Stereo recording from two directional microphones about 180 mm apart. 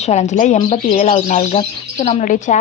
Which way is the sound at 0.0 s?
40° left (ahead or behind).